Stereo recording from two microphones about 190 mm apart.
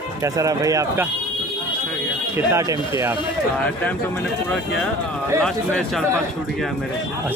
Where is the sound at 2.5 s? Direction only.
20° right (ahead or behind).